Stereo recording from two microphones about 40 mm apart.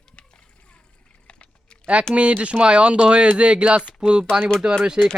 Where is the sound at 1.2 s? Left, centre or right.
Left.